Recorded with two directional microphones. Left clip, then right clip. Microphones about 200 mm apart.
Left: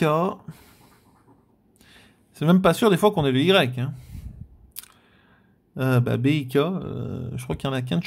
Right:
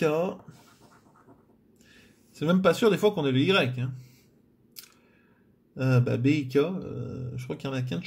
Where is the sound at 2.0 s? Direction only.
40° left (ahead or behind).